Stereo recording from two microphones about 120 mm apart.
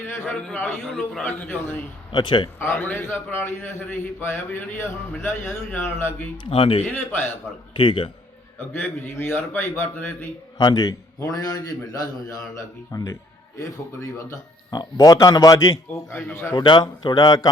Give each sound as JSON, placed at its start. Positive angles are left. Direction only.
{"t": 0.7, "sound": "a man's voice", "side_deg": 0}
{"t": 1.2, "sound": "a man's voice", "side_deg": 15}
{"t": 2.1, "sound": "a man's voice", "side_deg": 40}
{"t": 2.6, "sound": "a man's voice", "side_deg": 15}
{"t": 6.3, "sound": "speech", "side_deg": 45}
{"t": 8.5, "sound": "a man's voice", "side_deg": 20}
{"t": 10.6, "sound": "a man's voice", "side_deg": 35}
{"t": 16.6, "sound": "a man's voice", "side_deg": 35}